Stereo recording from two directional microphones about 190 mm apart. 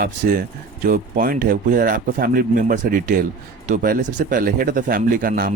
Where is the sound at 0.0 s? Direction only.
50° right (ahead or behind).